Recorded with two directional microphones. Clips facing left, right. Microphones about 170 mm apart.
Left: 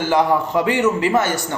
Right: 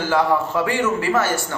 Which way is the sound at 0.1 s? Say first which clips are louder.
Left 2 dB; 15° left (ahead or behind).